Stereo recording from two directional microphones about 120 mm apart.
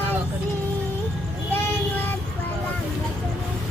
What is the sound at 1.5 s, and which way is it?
Child singing, 15° left (ahead or behind).